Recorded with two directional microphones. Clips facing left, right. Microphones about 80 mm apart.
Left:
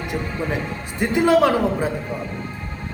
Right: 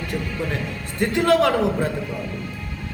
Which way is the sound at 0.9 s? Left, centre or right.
Centre.